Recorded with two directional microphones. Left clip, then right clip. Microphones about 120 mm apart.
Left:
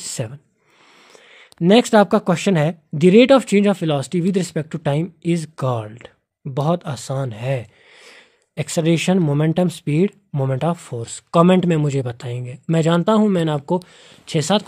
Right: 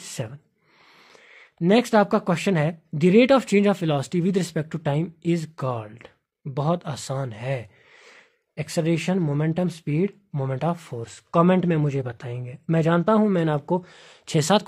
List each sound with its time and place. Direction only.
0.1 s speech: 30° left (ahead or behind)
1.1 s speech: 45° left (ahead or behind)
5.6 s speech: 50° left (ahead or behind); by 14.1 s 15° left (ahead or behind)
14.2 s speech: centre (ahead or behind)